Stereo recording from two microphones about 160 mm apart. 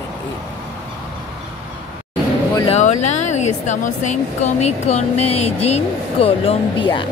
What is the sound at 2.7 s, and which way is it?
Speech, 45° left (ahead or behind).